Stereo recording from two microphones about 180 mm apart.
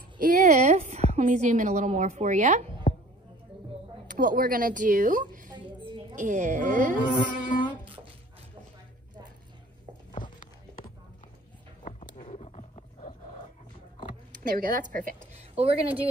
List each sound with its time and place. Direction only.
0.2 s a woman's voice: 50° right (ahead or behind)
2.9 s a sound: 35° left (ahead or behind)
4.1 s speech: 45° right (ahead or behind)
5.8 s a sound: 25° right (ahead or behind)
6.1 s speech: 45° right (ahead or behind)
7.2 s humming: 45° left (ahead or behind)
7.8 s music: 30° right (ahead or behind)
12.2 s roaring cats: 35° left (ahead or behind)
14.3 s a woman's voice: 50° right (ahead or behind)
15.3 s a sound: 35° right (ahead or behind)